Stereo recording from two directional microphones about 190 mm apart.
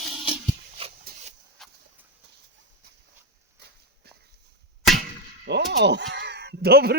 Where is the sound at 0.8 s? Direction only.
30° right (ahead or behind).